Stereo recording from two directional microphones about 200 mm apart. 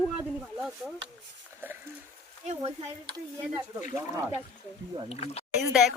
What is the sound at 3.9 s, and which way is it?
Speech, 10° right (ahead or behind).